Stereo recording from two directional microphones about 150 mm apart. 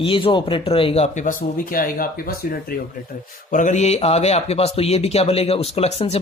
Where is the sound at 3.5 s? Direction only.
55° left (ahead or behind).